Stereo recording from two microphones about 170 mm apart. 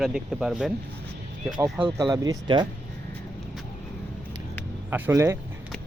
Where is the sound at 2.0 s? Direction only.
20° right (ahead or behind).